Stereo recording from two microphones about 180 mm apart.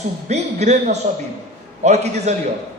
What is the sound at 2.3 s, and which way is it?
Speech, 40° right (ahead or behind).